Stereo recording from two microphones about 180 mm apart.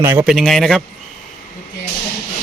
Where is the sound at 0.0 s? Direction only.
15° right (ahead or behind).